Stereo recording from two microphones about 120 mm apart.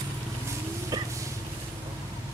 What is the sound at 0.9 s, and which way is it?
Vehicle, 30° right (ahead or behind).